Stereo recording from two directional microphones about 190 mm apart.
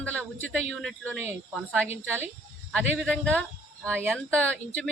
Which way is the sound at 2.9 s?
Centre (ahead or behind).